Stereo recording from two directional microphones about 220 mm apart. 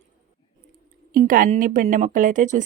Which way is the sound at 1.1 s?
40° right (ahead or behind).